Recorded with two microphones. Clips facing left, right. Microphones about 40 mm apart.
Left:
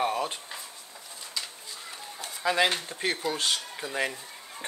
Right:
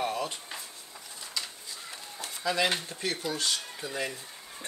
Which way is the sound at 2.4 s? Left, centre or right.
Left.